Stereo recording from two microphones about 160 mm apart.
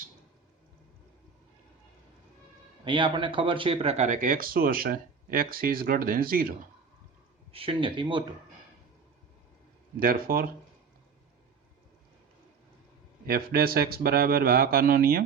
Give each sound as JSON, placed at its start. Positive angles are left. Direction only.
{"t": 2.8, "sound": "speech", "side_deg": -30}
{"t": 7.5, "sound": "speech", "side_deg": -35}
{"t": 10.0, "sound": "speech", "side_deg": -65}
{"t": 13.2, "sound": "a man's voice", "side_deg": -70}